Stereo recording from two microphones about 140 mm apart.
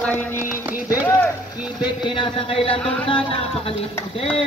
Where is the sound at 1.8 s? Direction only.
35° left (ahead or behind).